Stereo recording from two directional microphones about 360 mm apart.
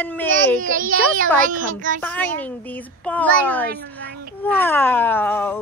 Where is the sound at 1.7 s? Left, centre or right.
Right.